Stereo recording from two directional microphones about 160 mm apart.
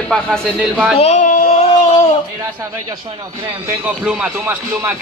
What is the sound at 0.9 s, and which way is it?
Speech, 40° left (ahead or behind).